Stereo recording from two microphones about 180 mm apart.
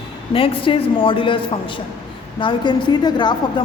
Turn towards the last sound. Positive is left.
turn(degrees=25)  # may be behind; listen again after turning